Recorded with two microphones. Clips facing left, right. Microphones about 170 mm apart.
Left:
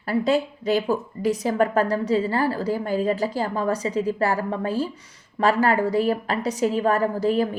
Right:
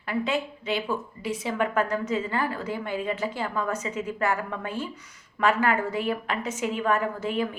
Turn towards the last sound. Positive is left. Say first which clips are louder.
# left 6 dB
turn(degrees=35)  # may be behind; listen again after turning